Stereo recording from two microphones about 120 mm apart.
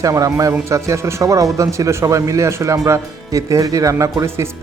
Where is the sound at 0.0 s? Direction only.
25° right (ahead or behind).